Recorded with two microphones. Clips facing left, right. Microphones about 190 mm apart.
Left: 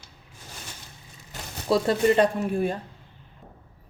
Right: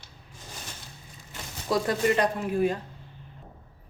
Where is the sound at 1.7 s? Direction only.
30° left (ahead or behind).